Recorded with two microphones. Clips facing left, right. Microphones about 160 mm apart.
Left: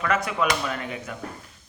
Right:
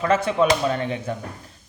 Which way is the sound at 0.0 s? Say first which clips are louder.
Right 5 dB; 30° right (ahead or behind).